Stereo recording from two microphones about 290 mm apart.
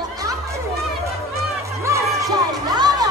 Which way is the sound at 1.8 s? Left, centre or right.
Centre.